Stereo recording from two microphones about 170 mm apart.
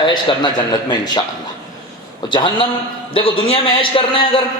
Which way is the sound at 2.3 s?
30° left (ahead or behind).